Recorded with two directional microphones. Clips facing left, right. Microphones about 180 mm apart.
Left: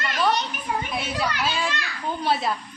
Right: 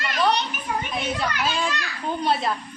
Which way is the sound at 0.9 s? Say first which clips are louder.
Even; 5° left (ahead or behind).